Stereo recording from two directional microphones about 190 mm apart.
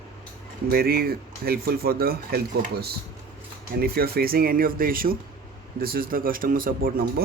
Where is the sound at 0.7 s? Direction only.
55° right (ahead or behind).